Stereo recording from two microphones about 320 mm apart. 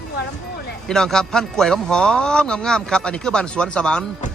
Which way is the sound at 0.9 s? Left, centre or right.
Centre.